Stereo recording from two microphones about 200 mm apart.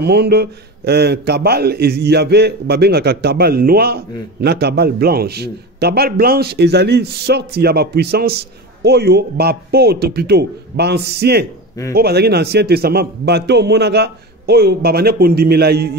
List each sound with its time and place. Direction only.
0.0 s a man's voice: 55° right (ahead or behind)